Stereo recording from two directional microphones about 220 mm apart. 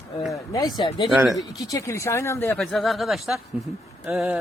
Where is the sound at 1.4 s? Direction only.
15° left (ahead or behind).